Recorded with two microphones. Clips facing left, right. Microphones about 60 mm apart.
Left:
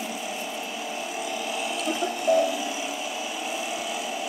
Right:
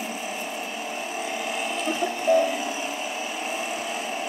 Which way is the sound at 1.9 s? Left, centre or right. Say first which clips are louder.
Right 2 dB; right.